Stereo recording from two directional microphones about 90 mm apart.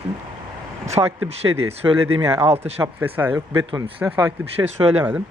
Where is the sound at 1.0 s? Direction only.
45° right (ahead or behind).